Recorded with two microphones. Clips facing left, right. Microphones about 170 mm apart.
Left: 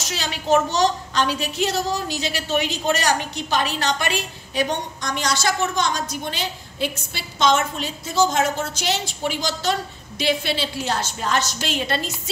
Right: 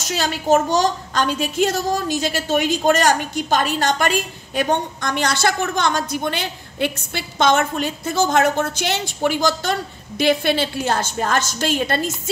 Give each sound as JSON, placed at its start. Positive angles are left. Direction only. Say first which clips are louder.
{"t": 0.1, "sound": "a woman's voice", "louder": "right 3 dB", "side_deg": -45}